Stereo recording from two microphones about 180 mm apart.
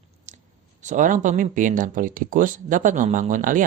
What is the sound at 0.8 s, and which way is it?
Speech, 45° right (ahead or behind).